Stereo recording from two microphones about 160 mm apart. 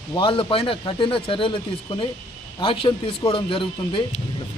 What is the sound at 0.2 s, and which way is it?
Speech, 35° left (ahead or behind).